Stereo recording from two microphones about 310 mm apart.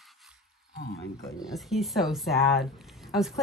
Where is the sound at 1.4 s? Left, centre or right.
Centre.